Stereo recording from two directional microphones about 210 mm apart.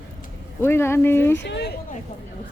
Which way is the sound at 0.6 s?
10° left (ahead or behind).